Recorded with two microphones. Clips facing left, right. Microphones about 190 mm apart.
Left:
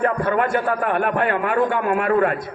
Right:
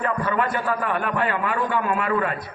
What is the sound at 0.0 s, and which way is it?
A man's voice, 50° left (ahead or behind).